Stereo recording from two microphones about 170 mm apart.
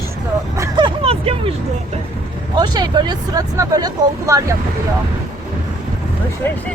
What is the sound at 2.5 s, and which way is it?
Speech, 25° right (ahead or behind).